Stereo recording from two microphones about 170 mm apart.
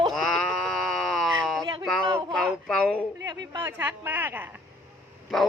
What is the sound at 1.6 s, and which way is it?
Speech, 30° right (ahead or behind).